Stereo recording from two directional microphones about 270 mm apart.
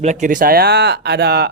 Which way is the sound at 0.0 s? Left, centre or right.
Right.